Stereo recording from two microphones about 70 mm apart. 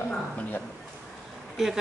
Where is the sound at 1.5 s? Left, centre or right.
Centre.